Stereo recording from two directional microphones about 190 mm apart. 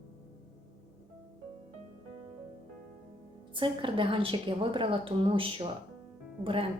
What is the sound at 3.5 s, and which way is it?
A woman's voice, 25° right (ahead or behind).